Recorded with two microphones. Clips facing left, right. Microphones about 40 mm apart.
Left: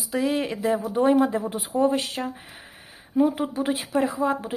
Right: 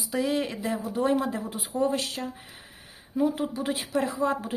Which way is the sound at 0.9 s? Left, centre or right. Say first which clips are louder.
Left 5 dB; left.